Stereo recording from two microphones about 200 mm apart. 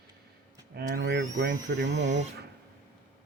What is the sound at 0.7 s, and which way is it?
Speech, 55° right (ahead or behind).